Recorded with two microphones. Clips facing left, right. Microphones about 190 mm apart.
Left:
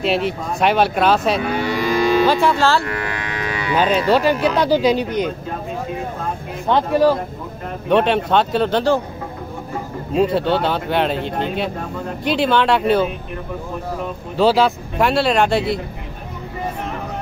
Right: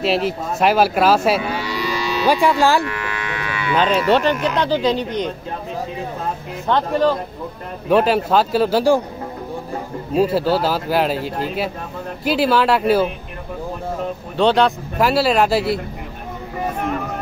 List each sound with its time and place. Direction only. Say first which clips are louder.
0.0 s speech: even; centre (ahead or behind)
1.5 s livestock: left 4 dB; 50° left (ahead or behind)
2.2 s speech: even; 15° right (ahead or behind)
2.8 s livestock: even; 35° left (ahead or behind)
4.1 s speech: left 1 dB; 10° left (ahead or behind)
6.7 s speech: left 2 dB; 10° left (ahead or behind)
7.9 s speech: even; 5° right (ahead or behind)
10.1 s speech: even; 5° right (ahead or behind)
14.3 s speech: left 1 dB; 5° left (ahead or behind)